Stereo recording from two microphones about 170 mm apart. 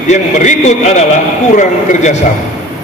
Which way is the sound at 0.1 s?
45° left (ahead or behind).